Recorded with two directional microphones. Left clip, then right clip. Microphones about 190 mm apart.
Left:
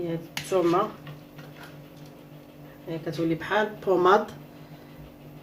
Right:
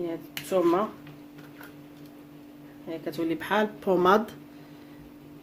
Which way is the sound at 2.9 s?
50° right (ahead or behind).